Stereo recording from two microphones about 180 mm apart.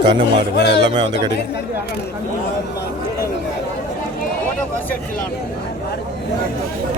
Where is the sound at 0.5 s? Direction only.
65° left (ahead or behind).